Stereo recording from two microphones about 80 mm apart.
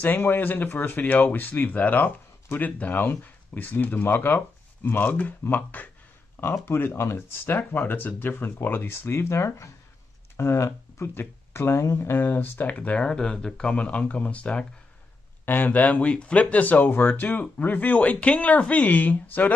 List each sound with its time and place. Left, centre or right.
0.0 s speech: left
6.4 s speech: left